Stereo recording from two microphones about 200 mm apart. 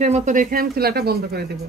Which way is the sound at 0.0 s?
35° right (ahead or behind).